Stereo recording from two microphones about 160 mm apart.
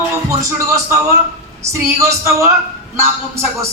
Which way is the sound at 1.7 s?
15° right (ahead or behind).